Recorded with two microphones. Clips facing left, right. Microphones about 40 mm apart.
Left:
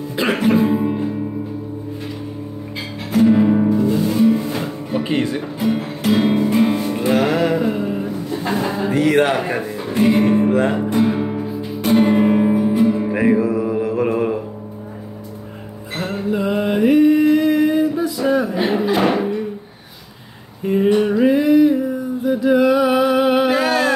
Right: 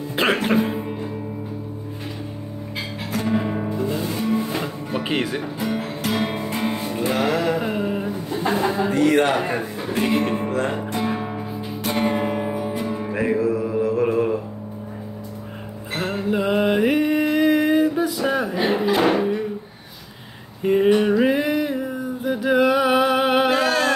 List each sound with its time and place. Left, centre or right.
0.3 s music: centre
3.1 s music: centre
5.1 s speech: centre
5.6 s music: centre
7.6 s a sound: centre
9.5 s speech: centre
10.5 s music: centre
13.1 s mantra: centre
16.0 s music: centre
16.3 s mantra: right
18.2 s a sound: centre
20.6 s a sound: centre
21.2 s music: right
23.5 s a sound: centre